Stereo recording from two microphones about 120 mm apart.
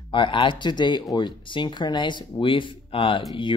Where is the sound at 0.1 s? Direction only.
45° left (ahead or behind).